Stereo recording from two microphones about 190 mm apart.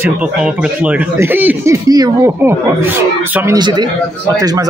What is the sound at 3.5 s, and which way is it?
Speech, 20° right (ahead or behind).